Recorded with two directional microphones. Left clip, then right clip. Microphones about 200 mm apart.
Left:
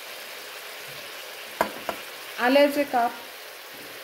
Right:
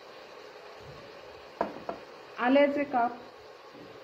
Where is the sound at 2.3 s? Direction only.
35° left (ahead or behind).